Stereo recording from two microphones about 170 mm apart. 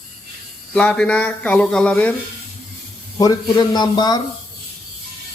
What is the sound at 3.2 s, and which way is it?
Speech, 20° left (ahead or behind).